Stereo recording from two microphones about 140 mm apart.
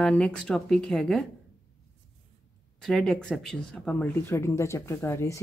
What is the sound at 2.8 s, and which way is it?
Speech, 5° left (ahead or behind).